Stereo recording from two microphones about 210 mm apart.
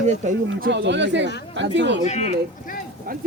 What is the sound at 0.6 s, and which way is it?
Speech, 55° right (ahead or behind).